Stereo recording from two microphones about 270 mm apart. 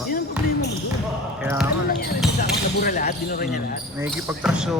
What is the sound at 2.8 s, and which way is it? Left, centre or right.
Speech, left.